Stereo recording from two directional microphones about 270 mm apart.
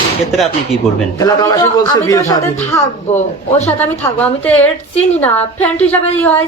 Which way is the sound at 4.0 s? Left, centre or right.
Centre.